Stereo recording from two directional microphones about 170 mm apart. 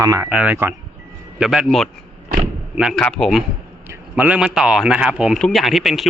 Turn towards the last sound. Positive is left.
turn(degrees=0)  # may be behind; listen again after turning